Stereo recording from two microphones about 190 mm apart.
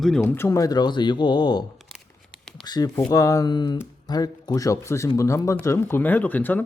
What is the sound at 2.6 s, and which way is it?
Speech, 20° left (ahead or behind).